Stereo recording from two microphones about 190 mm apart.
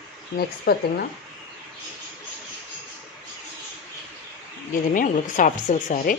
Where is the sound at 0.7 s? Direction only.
55° left (ahead or behind).